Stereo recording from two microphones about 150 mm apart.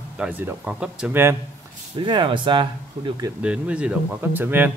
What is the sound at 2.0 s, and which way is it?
Speech, 30° right (ahead or behind).